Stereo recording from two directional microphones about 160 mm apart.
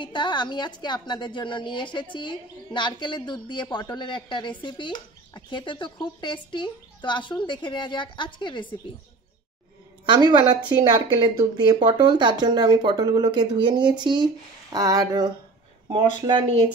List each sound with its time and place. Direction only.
0.0 s speech: 30° left (ahead or behind)
10.0 s a woman's voice: 25° right (ahead or behind)